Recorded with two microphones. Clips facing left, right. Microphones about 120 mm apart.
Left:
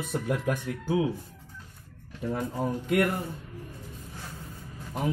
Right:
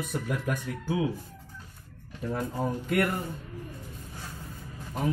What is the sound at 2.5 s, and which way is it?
Speech, 10° left (ahead or behind).